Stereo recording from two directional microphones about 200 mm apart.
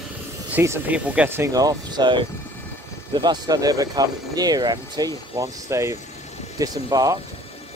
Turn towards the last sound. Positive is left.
turn(degrees=-20)  # may be behind; listen again after turning